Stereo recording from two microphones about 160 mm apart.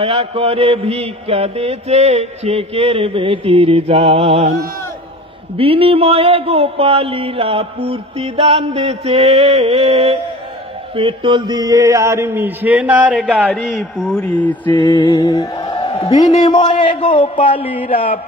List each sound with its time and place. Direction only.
0.0 s mantra: 40° right (ahead or behind)
5.6 s mantra: 35° right (ahead or behind); by 13.2 s 10° right (ahead or behind)
13.2 s a man's voice: centre (ahead or behind)
14.2 s mantra: 10° left (ahead or behind)
14.8 s speech: 30° left (ahead or behind)
16.6 s speech: 50° left (ahead or behind)
17.6 s speech: 10° right (ahead or behind)
17.8 s a sound: 60° left (ahead or behind)